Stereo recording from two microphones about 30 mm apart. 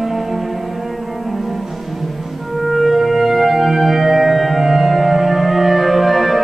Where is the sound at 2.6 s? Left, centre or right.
Centre.